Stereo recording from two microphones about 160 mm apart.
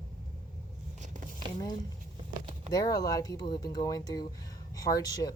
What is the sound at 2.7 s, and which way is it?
Speech, 20° left (ahead or behind).